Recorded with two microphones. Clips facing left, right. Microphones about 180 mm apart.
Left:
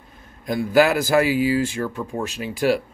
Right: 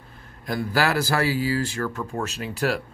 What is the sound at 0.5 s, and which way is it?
Speech, 20° left (ahead or behind).